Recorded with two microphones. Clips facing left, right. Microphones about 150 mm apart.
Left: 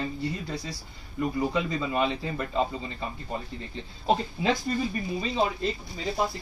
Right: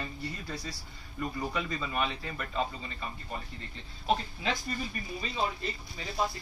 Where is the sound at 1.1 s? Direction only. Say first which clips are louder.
Left 7 dB; 20° left (ahead or behind).